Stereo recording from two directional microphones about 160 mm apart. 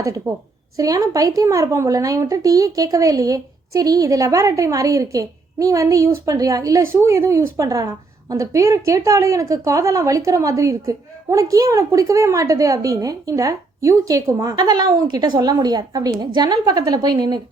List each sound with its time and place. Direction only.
0.3 s a woman's voice: 20° right (ahead or behind)